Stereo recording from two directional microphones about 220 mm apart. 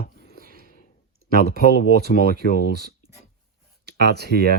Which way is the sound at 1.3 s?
45° right (ahead or behind).